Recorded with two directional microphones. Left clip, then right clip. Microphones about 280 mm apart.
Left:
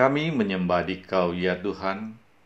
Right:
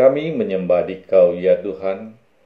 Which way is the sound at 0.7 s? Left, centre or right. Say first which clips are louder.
Right 10 dB; left.